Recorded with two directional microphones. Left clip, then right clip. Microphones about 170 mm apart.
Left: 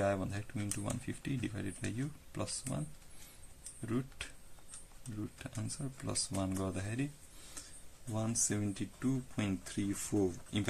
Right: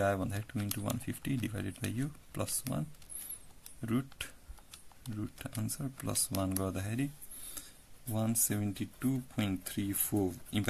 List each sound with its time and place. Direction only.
0.0 s speech: 45° right (ahead or behind)
3.8 s a sound: 50° right (ahead or behind)
5.4 s speech: 45° right (ahead or behind)
8.1 s speech: 35° right (ahead or behind)